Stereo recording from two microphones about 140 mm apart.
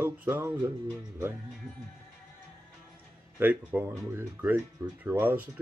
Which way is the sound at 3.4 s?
15° right (ahead or behind).